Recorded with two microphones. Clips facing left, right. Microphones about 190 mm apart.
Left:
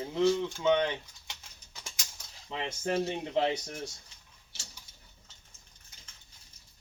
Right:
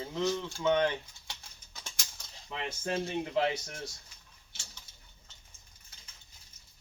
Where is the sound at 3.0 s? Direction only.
25° left (ahead or behind).